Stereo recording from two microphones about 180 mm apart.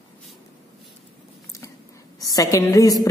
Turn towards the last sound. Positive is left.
turn(degrees=20)  # may be behind; listen again after turning